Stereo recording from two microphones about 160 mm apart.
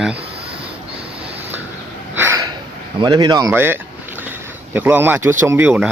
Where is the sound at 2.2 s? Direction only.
15° right (ahead or behind).